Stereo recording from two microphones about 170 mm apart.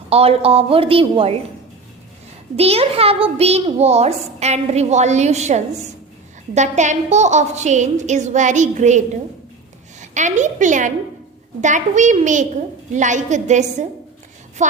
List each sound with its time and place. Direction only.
0.1 s a child's voice: 35° right (ahead or behind)
2.6 s a child's voice: 35° right (ahead or behind)